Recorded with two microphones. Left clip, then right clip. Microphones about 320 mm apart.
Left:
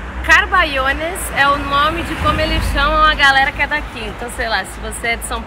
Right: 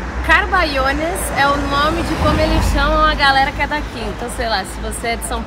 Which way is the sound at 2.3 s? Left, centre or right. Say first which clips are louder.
Left 1 dB; centre.